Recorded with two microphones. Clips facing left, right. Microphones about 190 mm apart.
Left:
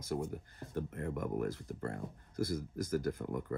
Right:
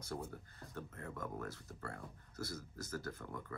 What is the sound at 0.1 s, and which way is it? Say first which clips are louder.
Speech: left 8 dB; 20° left (ahead or behind).